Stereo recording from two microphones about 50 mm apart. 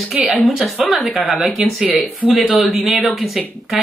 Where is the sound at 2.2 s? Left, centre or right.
Left.